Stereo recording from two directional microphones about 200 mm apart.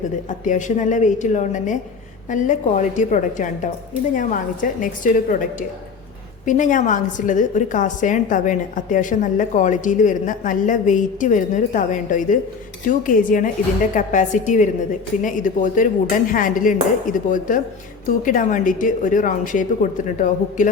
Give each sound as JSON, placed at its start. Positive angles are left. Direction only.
{"t": 0.3, "sound": "a woman's voice", "side_deg": 40}